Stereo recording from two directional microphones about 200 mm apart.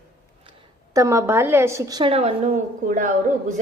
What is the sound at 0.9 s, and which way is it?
A woman's voice, 15° right (ahead or behind).